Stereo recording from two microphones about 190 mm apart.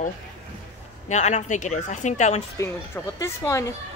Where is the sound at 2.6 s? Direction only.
15° left (ahead or behind).